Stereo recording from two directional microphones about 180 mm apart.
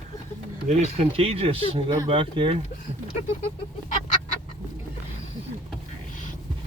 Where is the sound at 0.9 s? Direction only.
30° right (ahead or behind).